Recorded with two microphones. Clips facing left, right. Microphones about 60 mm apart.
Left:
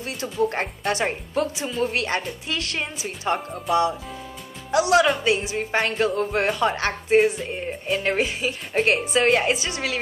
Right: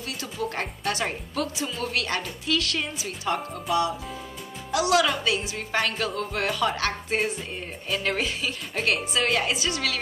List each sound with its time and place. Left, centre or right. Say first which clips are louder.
0.2 s speech: left 7 dB; left
4.6 s speech: left 4 dB; left